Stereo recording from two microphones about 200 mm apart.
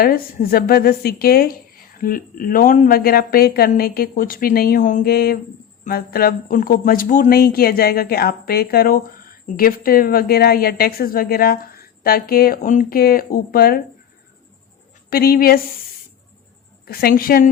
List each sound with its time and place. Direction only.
0.0 s speech: 45° left (ahead or behind)
15.1 s speech: 50° left (ahead or behind)
16.8 s speech: 50° left (ahead or behind)